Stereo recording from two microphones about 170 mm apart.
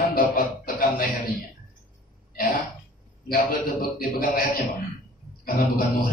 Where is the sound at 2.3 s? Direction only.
55° left (ahead or behind).